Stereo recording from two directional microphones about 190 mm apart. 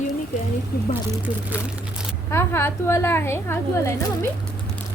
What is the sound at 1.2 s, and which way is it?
Speech, 10° right (ahead or behind).